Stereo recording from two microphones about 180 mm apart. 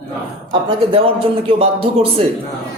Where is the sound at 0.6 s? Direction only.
30° right (ahead or behind).